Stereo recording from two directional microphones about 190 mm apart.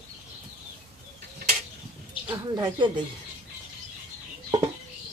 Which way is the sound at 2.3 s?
25° right (ahead or behind).